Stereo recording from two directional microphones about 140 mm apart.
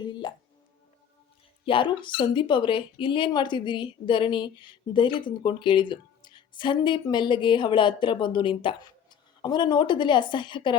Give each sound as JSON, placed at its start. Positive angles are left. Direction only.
{"t": 0.0, "sound": "music", "side_deg": 35}
{"t": 1.6, "sound": "a woman's voice", "side_deg": 35}